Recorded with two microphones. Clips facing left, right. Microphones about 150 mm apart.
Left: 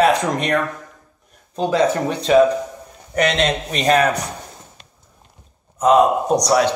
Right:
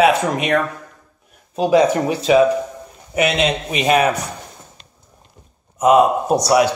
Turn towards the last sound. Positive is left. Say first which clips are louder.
# right 1 dB
turn(degrees=-10)  # may be behind; listen again after turning